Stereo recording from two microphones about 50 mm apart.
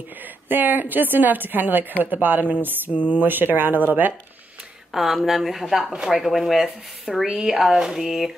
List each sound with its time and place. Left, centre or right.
0.5 s a woman's voice: right
2.9 s speech: left
3.2 s a woman's voice: right
4.9 s speech: centre